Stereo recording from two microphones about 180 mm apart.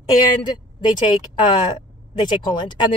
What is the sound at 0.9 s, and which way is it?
Speech, 25° left (ahead or behind).